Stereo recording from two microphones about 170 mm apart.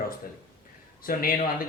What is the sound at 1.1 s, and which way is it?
Speech, 60° left (ahead or behind).